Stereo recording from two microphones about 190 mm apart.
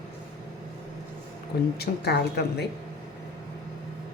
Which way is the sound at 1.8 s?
60° left (ahead or behind).